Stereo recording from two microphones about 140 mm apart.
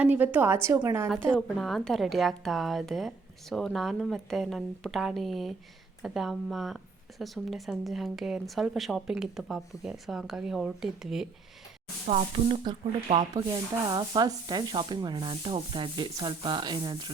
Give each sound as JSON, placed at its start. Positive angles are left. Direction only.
{"t": 0.0, "sound": "a woman's voice", "side_deg": -10}
{"t": 1.3, "sound": "a woman's voice", "side_deg": 5}
{"t": 12.0, "sound": "speech", "side_deg": -50}
{"t": 13.3, "sound": "speech", "side_deg": -30}